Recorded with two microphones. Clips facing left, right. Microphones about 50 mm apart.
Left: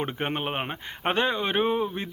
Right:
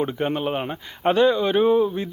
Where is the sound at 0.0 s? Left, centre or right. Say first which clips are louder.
Right 5 dB; left.